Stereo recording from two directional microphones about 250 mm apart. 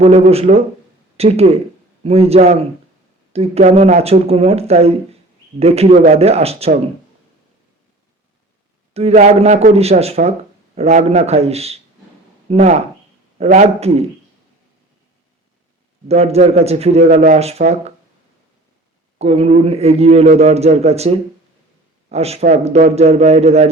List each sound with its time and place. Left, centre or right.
0.0 s a man's voice: right
8.9 s a man's voice: right
16.0 s a man's voice: right
19.2 s a man's voice: right